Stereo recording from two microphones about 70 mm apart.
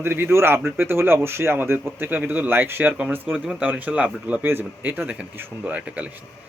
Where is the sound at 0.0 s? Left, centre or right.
Right.